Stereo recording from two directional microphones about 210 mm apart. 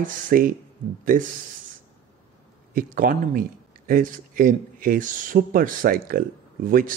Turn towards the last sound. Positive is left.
turn(degrees=-40)  # may be behind; listen again after turning